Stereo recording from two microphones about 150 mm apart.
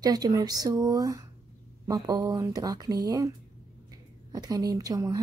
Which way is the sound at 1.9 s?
25° right (ahead or behind).